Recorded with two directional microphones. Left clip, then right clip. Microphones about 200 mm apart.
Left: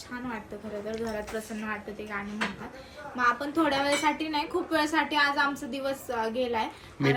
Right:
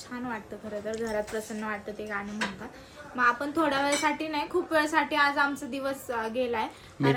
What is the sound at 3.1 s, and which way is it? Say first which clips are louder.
A woman's voice: right 1 dB; centre (ahead or behind).